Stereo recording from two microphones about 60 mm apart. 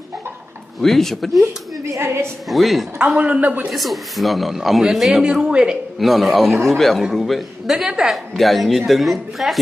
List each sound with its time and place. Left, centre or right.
0.7 s a man's voice: centre
2.0 s a woman's voice: right
2.5 s a man's voice: centre
3.0 s a man's voice: centre
3.7 s a man's voice: centre
5.9 s a man's voice: centre